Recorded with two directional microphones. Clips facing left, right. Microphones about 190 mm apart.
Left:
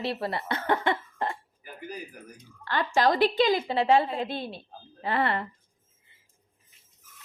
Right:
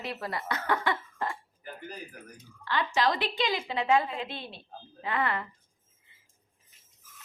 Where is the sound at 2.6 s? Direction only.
45° left (ahead or behind).